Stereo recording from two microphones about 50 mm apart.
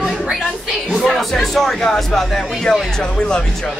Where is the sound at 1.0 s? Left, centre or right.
Centre.